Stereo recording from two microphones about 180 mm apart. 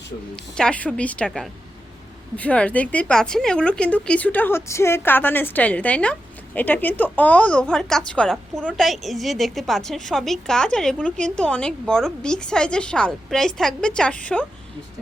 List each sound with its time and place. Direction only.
0.5 s a woman's voice: 5° left (ahead or behind)